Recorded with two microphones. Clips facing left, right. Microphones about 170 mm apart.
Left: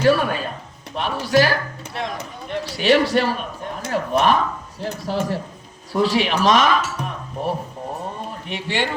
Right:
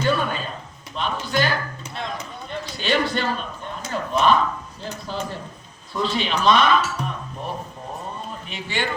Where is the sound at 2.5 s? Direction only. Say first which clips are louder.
Left 7 dB; 90° left.